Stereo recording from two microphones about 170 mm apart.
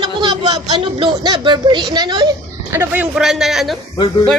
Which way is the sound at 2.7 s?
10° right (ahead or behind).